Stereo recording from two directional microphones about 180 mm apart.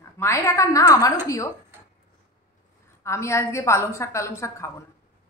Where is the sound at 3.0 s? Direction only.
15° left (ahead or behind).